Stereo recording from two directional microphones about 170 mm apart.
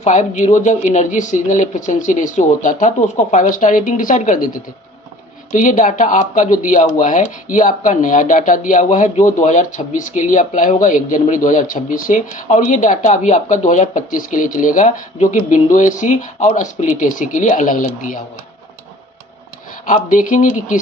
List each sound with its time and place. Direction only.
0.0 s speech: 45° left (ahead or behind)
19.8 s speech: 50° left (ahead or behind)